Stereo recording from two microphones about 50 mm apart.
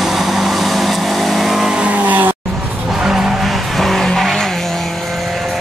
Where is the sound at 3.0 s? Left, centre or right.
Centre.